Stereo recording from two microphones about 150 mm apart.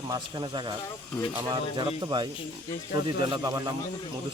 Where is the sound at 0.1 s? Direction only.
30° right (ahead or behind).